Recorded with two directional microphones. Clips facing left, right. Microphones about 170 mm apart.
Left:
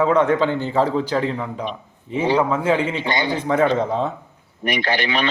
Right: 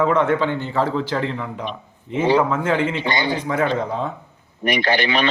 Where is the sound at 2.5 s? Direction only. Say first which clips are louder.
Left 2 dB; 15° left (ahead or behind).